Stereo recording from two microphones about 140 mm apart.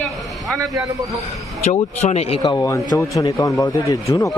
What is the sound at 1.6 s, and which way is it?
Speech, 55° left (ahead or behind).